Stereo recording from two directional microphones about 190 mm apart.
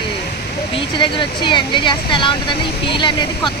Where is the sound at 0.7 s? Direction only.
25° left (ahead or behind).